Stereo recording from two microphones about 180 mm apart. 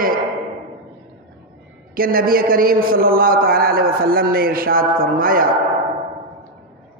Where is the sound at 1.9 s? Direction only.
55° right (ahead or behind).